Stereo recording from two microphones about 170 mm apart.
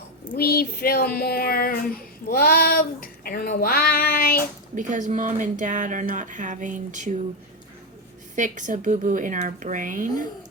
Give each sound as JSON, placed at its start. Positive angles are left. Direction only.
{"t": 0.3, "sound": "speech", "side_deg": 65}
{"t": 4.7, "sound": "speech", "side_deg": -50}
{"t": 8.4, "sound": "speech", "side_deg": -50}